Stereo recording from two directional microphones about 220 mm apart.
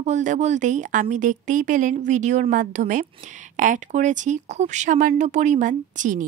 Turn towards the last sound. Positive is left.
turn(degrees=-35)  # may be behind; listen again after turning